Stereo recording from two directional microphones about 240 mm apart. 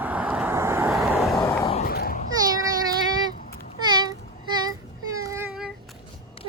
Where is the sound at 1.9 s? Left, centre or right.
Left.